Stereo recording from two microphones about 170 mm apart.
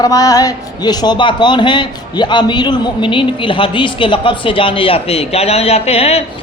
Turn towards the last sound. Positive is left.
turn(degrees=35)  # may be behind; listen again after turning